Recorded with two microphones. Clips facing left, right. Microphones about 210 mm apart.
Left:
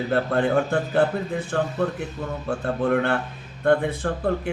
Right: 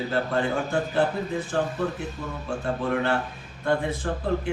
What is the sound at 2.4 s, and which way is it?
Speech, 55° left (ahead or behind).